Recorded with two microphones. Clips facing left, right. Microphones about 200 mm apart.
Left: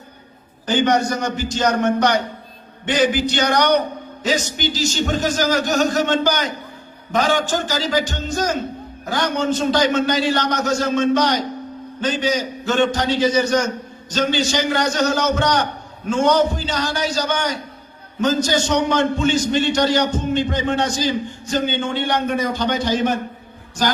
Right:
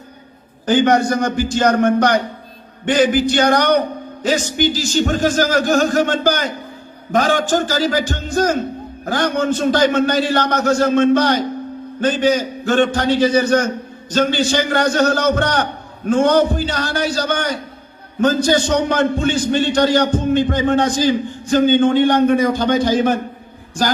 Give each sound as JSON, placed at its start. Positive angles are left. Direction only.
{"t": 0.9, "sound": "a man's voice", "side_deg": -55}
{"t": 4.6, "sound": "speech", "side_deg": -10}
{"t": 5.0, "sound": "a man's voice", "side_deg": -50}
{"t": 20.1, "sound": "speech", "side_deg": -10}
{"t": 20.5, "sound": "a man's voice", "side_deg": -55}